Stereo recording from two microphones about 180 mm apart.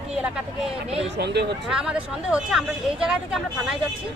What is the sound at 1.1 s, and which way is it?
Speech, 70° right (ahead or behind).